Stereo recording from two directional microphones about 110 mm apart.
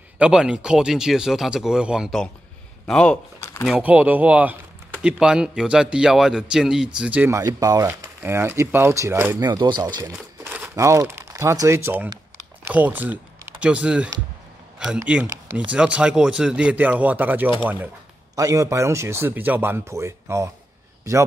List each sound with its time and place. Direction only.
0.2 s speech: 10° right (ahead or behind)
2.9 s speech: 10° left (ahead or behind)
3.3 s a sound: 25° left (ahead or behind)
3.8 s speech: 15° right (ahead or behind)
7.2 s speech: 30° right (ahead or behind)
7.9 s speech: 20° right (ahead or behind)
9.4 s speech: 40° right (ahead or behind)
10.4 s crumpling: 15° right (ahead or behind)
10.8 s speech: 30° right (ahead or behind)
18.3 s speech: 30° right (ahead or behind)